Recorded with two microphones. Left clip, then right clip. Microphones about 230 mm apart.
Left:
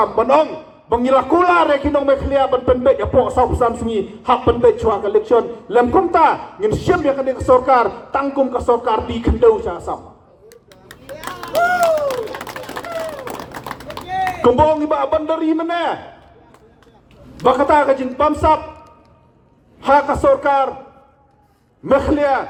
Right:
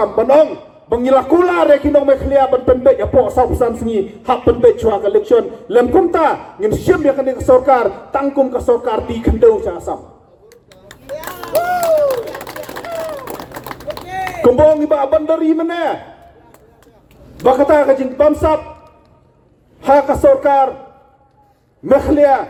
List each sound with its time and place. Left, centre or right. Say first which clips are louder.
0.0 s a man's voice: right 3 dB; right
10.5 s a sound: right 1 dB; left
14.3 s a man's voice: right 4 dB; right
17.4 s a man's voice: right 3 dB; right
19.8 s a man's voice: right 3 dB; right
21.8 s a man's voice: right 4 dB; right